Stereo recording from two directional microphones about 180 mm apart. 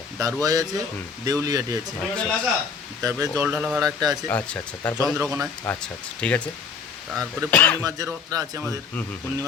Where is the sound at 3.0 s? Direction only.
20° right (ahead or behind); by 3.9 s centre (ahead or behind).